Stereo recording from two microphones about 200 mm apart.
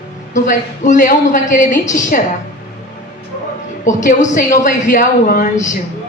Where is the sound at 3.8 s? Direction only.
40° left (ahead or behind).